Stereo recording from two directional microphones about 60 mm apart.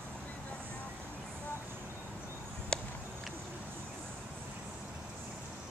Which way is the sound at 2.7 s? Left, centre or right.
Centre.